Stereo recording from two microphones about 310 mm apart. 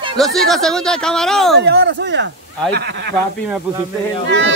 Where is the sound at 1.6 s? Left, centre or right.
Right.